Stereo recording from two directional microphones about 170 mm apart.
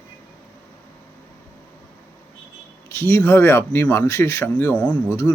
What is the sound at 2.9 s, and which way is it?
Speech, 15° left (ahead or behind).